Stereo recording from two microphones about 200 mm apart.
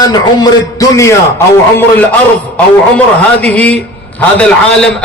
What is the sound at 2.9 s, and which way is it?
A man's voice, 5° left (ahead or behind).